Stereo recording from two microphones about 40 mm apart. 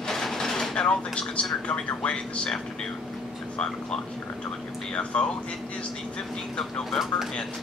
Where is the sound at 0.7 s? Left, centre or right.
Left.